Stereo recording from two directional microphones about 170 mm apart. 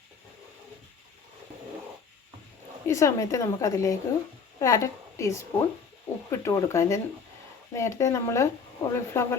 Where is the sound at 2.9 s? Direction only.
20° left (ahead or behind).